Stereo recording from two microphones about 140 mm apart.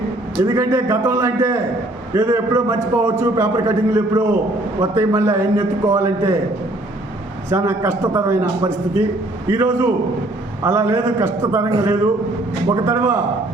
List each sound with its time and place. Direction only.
0.4 s a man's voice: 20° right (ahead or behind)
7.5 s a man's voice: 20° right (ahead or behind)